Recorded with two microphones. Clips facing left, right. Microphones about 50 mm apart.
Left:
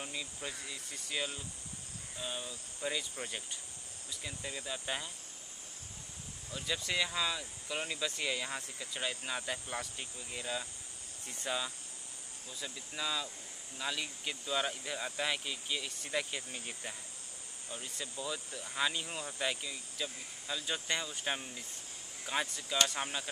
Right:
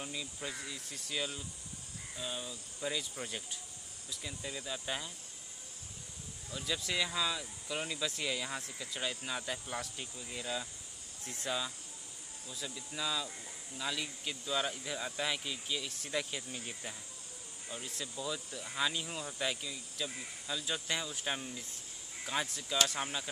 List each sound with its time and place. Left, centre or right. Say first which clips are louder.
0.0 s speech: even; centre
6.5 s speech: left 1 dB; centre